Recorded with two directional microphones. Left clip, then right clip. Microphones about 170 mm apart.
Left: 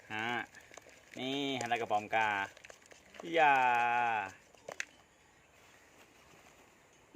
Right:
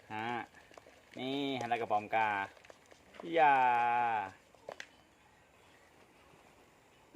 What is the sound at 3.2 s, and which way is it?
Speech, 5° right (ahead or behind).